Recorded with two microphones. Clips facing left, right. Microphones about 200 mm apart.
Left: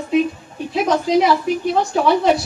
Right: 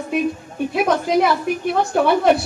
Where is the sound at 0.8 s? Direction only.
55° right (ahead or behind).